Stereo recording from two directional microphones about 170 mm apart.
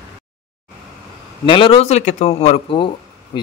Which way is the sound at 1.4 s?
30° left (ahead or behind).